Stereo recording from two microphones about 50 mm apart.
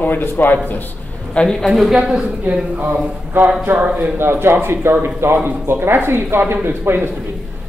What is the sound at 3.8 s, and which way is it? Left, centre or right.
Speech, right.